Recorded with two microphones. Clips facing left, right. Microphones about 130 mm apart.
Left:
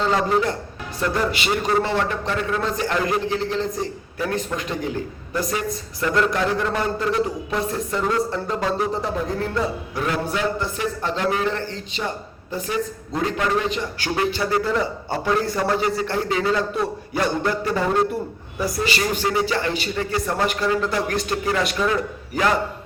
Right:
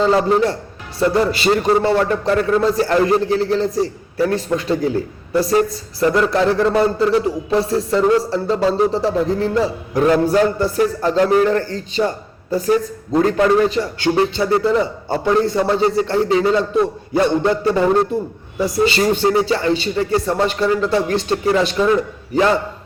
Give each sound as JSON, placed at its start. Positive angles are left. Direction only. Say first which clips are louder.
{"t": 0.0, "sound": "a man's voice", "louder": "right 5 dB", "side_deg": -30}